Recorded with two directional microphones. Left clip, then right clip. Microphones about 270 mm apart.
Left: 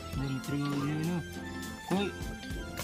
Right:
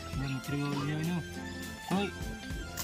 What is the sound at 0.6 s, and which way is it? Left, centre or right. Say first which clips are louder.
Speech: left 2 dB; centre.